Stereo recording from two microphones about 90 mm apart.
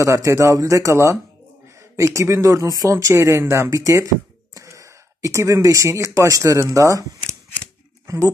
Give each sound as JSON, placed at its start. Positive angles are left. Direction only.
{"t": 0.0, "sound": "speech", "side_deg": -35}